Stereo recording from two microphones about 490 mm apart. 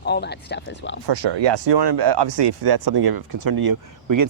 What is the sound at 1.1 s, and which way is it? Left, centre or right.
Speech, right.